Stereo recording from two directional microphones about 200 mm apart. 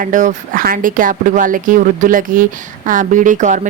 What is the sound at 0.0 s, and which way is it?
A woman's voice, 40° right (ahead or behind).